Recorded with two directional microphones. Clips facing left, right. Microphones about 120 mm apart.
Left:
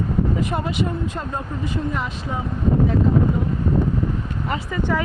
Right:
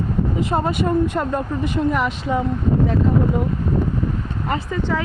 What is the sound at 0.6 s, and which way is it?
Speech, 50° right (ahead or behind).